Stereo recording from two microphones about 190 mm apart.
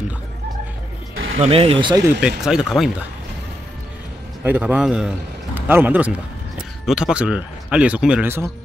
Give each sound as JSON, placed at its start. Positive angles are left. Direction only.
{"t": 1.1, "sound": "a sound", "side_deg": -90}
{"t": 1.4, "sound": "speech", "side_deg": -30}
{"t": 2.2, "sound": "speech", "side_deg": -5}
{"t": 4.4, "sound": "a man's voice", "side_deg": -5}